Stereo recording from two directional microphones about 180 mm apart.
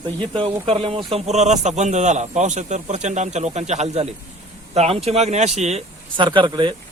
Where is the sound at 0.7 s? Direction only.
30° right (ahead or behind).